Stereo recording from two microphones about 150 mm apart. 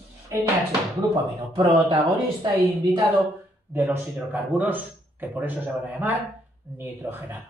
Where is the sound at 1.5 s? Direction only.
30° right (ahead or behind).